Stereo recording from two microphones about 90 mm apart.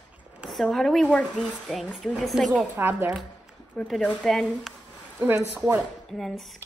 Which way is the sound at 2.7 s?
25° right (ahead or behind).